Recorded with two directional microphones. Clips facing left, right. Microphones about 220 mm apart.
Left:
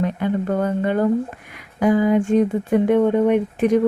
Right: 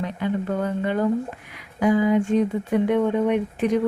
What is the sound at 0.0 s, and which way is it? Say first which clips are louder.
Speech: left 4 dB; 50° left (ahead or behind).